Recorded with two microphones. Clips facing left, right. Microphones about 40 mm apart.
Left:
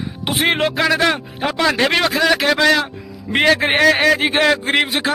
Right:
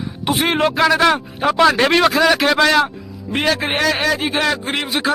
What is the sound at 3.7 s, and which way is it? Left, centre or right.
Speech, left.